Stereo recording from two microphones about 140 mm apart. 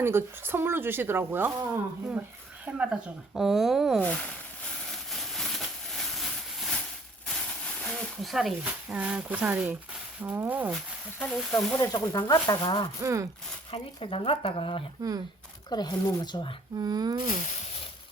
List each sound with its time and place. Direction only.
0.0 s speech: 15° right (ahead or behind)
4.0 s speech: 10° left (ahead or behind)
5.3 s a sound: centre (ahead or behind)
7.9 s speech: centre (ahead or behind)
11.2 s speech: 10° left (ahead or behind)
11.8 s speech: 30° left (ahead or behind)
13.0 s speech: 20° right (ahead or behind)
13.7 s speech: 40° left (ahead or behind)
16.8 s speech: 30° right (ahead or behind)